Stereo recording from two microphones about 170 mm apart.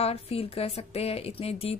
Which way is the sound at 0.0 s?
35° left (ahead or behind).